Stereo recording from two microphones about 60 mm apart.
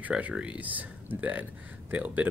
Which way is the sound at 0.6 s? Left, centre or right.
Right.